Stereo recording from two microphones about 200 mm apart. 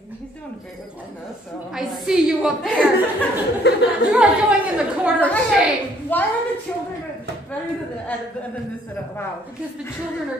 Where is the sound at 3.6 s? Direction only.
55° left (ahead or behind).